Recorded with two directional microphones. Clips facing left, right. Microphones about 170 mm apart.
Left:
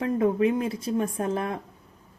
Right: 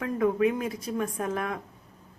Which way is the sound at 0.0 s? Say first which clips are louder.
Left 2 dB; 30° left (ahead or behind).